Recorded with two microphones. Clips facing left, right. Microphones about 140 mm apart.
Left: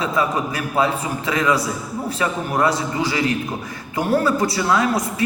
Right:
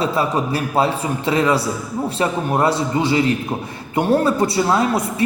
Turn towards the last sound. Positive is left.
turn(degrees=-30)  # may be behind; listen again after turning